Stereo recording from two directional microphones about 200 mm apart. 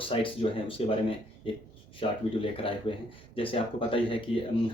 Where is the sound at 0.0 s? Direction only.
25° left (ahead or behind).